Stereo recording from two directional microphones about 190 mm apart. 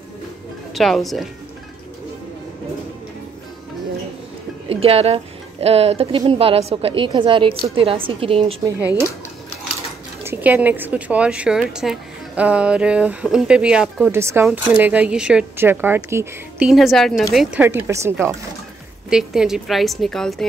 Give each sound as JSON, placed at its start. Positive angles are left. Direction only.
{"t": 0.7, "sound": "speech", "side_deg": 0}
{"t": 4.6, "sound": "a woman's voice", "side_deg": -30}
{"t": 8.6, "sound": "speech", "side_deg": -10}
{"t": 10.2, "sound": "speech", "side_deg": -10}
{"t": 16.6, "sound": "speech", "side_deg": 0}
{"t": 19.0, "sound": "speech", "side_deg": -5}